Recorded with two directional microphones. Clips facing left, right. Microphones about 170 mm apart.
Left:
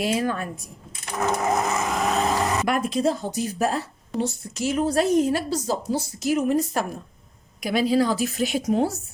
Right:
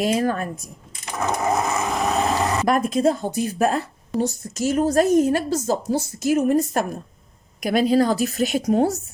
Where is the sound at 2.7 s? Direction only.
45° right (ahead or behind).